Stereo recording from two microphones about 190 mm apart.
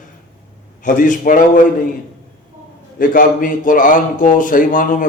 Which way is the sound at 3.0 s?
45° left (ahead or behind).